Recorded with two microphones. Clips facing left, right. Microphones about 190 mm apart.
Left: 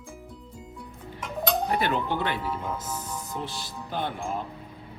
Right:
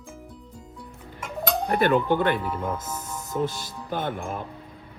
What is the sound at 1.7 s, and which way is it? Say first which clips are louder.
Speech: right 5 dB; 50° right (ahead or behind).